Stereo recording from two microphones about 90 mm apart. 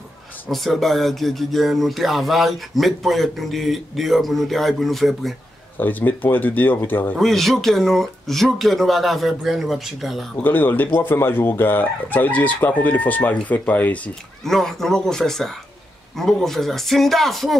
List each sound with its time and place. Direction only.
0.5 s speech: 5° left (ahead or behind)
5.8 s speech: 20° left (ahead or behind)
7.2 s speech: centre (ahead or behind)
10.4 s speech: 20° left (ahead or behind)
14.4 s speech: 5° left (ahead or behind)